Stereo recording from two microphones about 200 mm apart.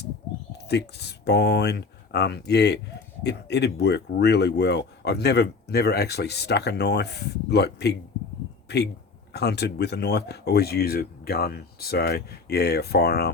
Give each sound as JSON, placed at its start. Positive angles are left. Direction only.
{"t": 0.7, "sound": "speech", "side_deg": 55}